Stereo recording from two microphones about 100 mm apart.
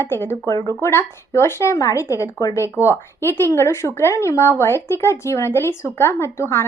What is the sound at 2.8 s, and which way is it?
A woman's voice, 25° left (ahead or behind).